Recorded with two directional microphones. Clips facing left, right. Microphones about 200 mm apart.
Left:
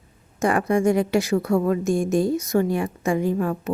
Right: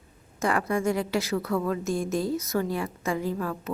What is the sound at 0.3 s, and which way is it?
A woman's voice, 15° left (ahead or behind).